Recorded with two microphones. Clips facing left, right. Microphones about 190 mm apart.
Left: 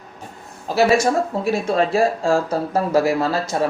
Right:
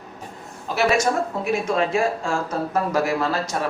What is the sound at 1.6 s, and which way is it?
Speech, 35° left (ahead or behind).